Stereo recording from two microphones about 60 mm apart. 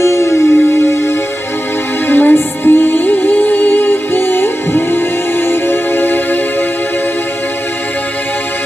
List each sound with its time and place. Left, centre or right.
0.0 s music: left